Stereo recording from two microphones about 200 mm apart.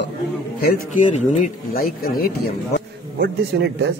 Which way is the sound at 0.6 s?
40° left (ahead or behind).